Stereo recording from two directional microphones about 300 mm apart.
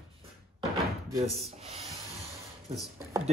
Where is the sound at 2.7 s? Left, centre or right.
Centre.